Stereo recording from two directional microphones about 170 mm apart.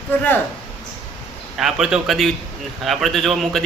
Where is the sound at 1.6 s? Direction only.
5° right (ahead or behind).